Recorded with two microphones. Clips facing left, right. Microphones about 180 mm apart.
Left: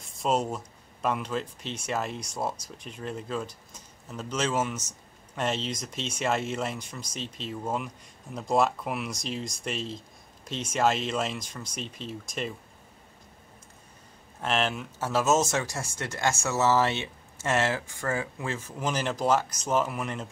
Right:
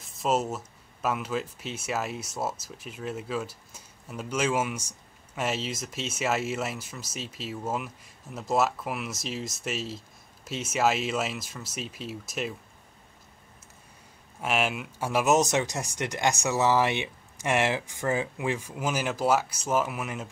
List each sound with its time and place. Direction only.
0.0 s speech: 5° right (ahead or behind)
14.4 s speech: 10° right (ahead or behind)